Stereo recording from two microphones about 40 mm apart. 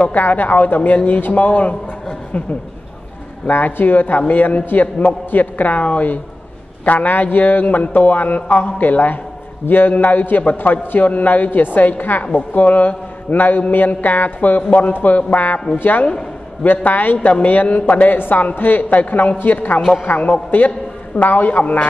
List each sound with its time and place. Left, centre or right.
0.1 s a man's voice: left
3.4 s a man's voice: left
16.6 s a man's voice: left
20.1 s a man's voice: left